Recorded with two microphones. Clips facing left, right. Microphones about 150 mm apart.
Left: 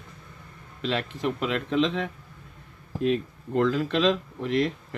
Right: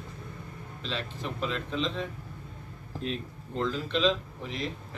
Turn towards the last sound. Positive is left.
turn(degrees=70)  # may be behind; listen again after turning